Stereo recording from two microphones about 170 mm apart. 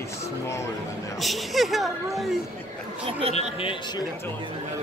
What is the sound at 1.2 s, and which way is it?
Speech, centre (ahead or behind).